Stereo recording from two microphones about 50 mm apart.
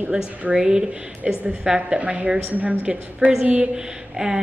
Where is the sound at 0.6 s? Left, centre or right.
Centre.